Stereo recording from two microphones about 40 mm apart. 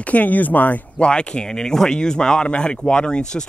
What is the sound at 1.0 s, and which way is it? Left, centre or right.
Speech, left.